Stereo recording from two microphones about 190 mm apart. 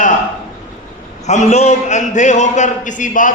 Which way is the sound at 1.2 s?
40° left (ahead or behind).